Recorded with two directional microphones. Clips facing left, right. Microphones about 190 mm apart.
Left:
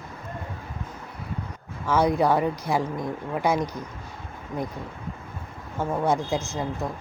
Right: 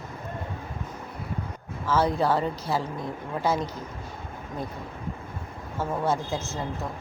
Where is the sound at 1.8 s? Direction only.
15° left (ahead or behind).